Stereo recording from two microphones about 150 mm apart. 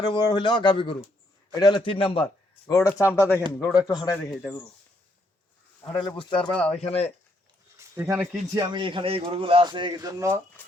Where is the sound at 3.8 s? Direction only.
30° left (ahead or behind).